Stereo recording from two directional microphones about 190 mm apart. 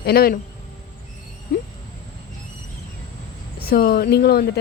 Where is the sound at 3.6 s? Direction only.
55° left (ahead or behind).